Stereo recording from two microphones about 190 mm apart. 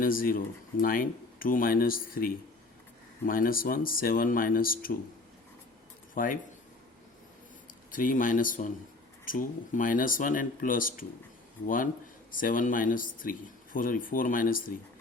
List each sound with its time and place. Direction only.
0.0 s speech: 50° left (ahead or behind)
6.1 s speech: 45° left (ahead or behind)
7.9 s speech: 45° left (ahead or behind)